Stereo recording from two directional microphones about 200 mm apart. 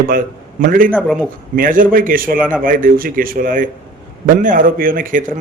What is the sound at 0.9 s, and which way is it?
Speech, 5° left (ahead or behind).